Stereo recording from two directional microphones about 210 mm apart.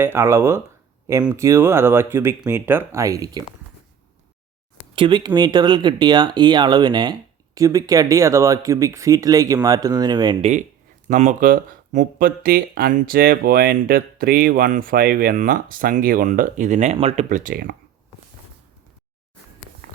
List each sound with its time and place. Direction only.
0.0 s speech: 10° right (ahead or behind)
4.9 s speech: 20° right (ahead or behind)
11.1 s speech: 35° right (ahead or behind)